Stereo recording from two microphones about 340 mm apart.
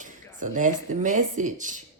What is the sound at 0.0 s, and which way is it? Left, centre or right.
Speech, right.